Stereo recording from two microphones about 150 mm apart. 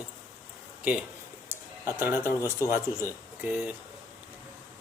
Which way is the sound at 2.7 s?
15° right (ahead or behind).